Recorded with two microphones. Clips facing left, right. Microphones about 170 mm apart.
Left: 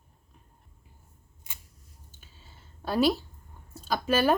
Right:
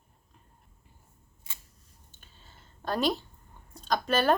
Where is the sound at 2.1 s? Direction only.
5° left (ahead or behind).